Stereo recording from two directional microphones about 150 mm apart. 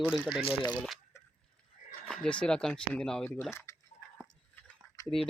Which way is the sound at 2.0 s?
5° left (ahead or behind).